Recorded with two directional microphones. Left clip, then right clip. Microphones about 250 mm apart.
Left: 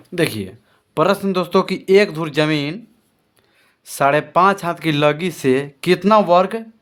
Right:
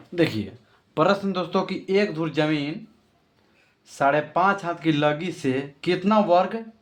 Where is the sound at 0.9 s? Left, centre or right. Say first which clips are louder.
Left 5 dB; left.